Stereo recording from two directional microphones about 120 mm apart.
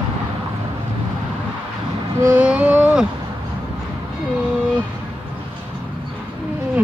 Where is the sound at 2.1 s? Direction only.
25° right (ahead or behind).